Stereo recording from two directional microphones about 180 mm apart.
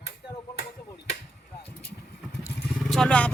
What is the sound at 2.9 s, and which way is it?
Speech, 5° left (ahead or behind).